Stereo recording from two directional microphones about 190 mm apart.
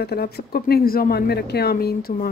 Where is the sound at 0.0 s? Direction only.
55° left (ahead or behind).